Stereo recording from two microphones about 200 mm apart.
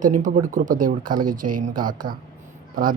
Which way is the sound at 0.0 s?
40° right (ahead or behind).